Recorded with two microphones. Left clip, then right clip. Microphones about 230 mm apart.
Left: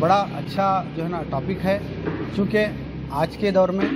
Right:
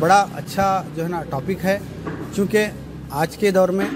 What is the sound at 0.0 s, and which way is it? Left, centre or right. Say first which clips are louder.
Speech: right 4 dB; right.